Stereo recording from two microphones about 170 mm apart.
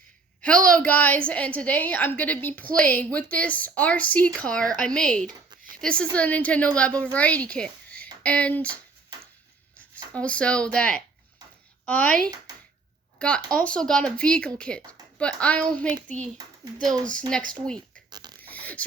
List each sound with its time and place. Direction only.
0.8 s speech: 10° left (ahead or behind)
13.1 s speech: 5° left (ahead or behind)
18.1 s beatboxing: 25° right (ahead or behind)
18.3 s a sound: 10° left (ahead or behind)